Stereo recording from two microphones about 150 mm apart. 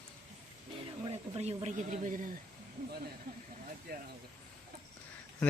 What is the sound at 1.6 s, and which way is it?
Speech, 55° right (ahead or behind).